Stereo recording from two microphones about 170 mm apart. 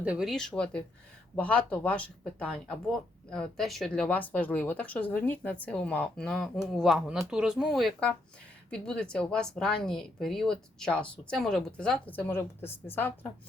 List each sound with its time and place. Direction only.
0.0 s a woman's voice: 5° right (ahead or behind); by 13.1 s 10° left (ahead or behind)